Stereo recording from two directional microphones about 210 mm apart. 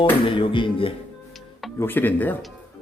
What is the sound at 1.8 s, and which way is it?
Speech, 10° left (ahead or behind).